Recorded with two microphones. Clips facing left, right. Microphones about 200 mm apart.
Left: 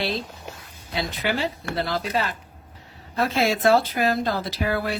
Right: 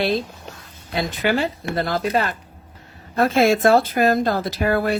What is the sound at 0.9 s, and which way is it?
Speech, 50° right (ahead or behind).